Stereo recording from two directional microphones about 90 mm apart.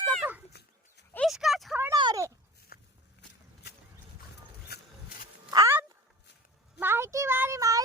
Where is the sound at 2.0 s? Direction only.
60° right (ahead or behind).